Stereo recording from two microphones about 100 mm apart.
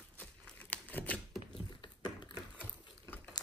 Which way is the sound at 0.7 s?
15° left (ahead or behind).